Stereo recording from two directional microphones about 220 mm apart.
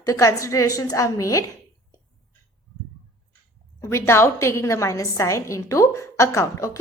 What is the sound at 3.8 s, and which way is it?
A woman's voice, 10° left (ahead or behind).